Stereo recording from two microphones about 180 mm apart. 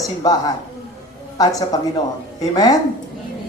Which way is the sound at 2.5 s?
20° left (ahead or behind).